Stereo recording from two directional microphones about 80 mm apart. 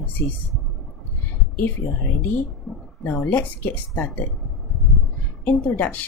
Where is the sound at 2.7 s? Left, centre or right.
Centre.